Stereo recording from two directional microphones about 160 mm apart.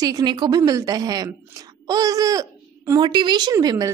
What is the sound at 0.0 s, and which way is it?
A woman's voice, 25° right (ahead or behind).